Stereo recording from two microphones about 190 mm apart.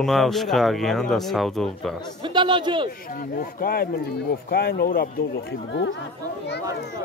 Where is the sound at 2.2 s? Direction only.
25° right (ahead or behind).